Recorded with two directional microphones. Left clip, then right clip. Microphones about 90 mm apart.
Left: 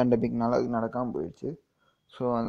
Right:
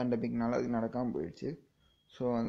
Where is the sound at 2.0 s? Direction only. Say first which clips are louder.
Left 5 dB; 40° left (ahead or behind).